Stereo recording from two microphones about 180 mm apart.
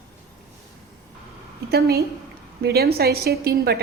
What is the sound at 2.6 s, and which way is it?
A woman's voice, 65° right (ahead or behind).